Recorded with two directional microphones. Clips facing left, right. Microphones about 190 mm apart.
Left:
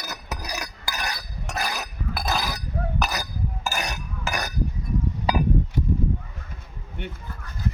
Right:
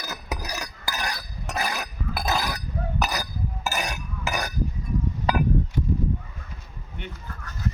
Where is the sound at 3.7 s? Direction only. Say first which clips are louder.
Right 1 dB; centre (ahead or behind).